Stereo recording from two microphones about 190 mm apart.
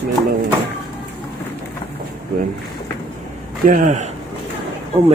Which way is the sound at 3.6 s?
45° right (ahead or behind).